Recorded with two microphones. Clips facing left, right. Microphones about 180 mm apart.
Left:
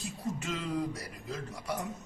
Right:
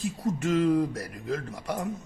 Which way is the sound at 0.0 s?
55° right (ahead or behind).